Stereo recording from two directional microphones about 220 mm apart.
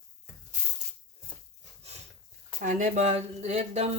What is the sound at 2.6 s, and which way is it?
Speech, 35° right (ahead or behind).